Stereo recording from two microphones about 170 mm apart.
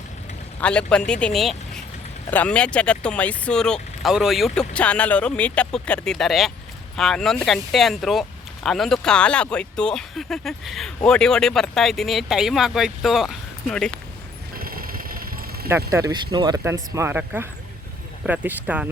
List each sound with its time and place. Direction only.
0.6 s speech: 5° left (ahead or behind)
14.5 s vehicle: 60° right (ahead or behind)
15.9 s speech: 20° right (ahead or behind)